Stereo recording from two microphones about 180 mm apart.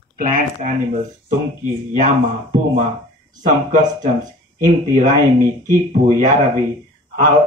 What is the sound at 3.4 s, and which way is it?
Speech, 45° right (ahead or behind).